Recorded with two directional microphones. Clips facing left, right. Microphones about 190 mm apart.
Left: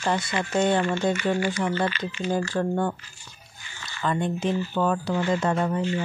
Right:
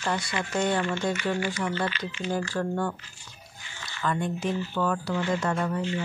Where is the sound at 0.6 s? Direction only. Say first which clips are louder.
Left 4 dB; 25° left (ahead or behind).